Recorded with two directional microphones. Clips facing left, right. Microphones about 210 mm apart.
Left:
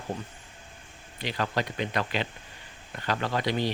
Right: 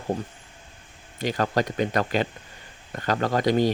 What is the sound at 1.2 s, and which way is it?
Speech, 45° right (ahead or behind).